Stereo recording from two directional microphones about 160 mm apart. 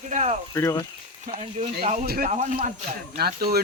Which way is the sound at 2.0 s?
75° right (ahead or behind).